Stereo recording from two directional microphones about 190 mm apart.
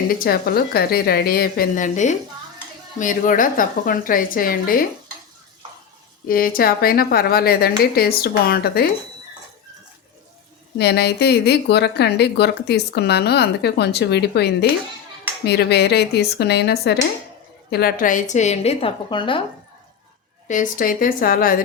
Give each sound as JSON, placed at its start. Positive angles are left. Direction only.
{"t": 0.2, "sound": "a woman's voice", "side_deg": 55}
{"t": 6.2, "sound": "a woman's voice", "side_deg": 50}
{"t": 10.8, "sound": "a woman's voice", "side_deg": 60}
{"t": 20.5, "sound": "a woman's voice", "side_deg": 45}